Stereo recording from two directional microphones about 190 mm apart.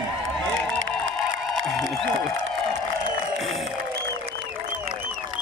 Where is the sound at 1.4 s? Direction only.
Centre (ahead or behind).